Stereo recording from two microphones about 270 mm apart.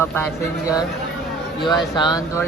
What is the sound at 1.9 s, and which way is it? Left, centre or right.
Speech, centre.